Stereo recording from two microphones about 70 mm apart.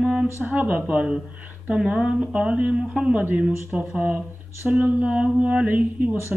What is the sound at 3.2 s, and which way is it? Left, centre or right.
Speech, right.